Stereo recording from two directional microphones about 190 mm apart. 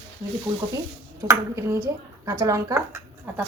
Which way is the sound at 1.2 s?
15° right (ahead or behind).